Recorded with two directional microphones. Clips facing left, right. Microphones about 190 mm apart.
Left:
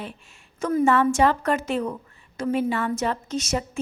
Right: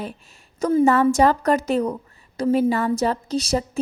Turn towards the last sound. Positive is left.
turn(degrees=-35)  # may be behind; listen again after turning